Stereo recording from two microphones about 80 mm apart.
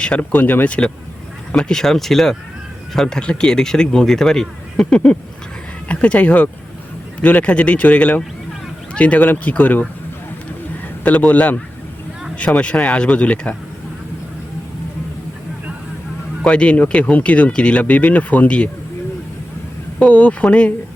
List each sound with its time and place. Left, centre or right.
0.0 s speech: centre
11.0 s speech: centre
16.4 s speech: centre
20.0 s speech: centre